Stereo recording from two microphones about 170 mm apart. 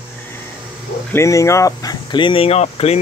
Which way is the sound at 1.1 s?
15° left (ahead or behind).